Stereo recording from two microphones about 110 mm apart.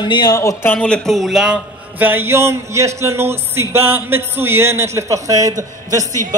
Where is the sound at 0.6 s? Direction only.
15° left (ahead or behind); by 6.0 s 30° right (ahead or behind).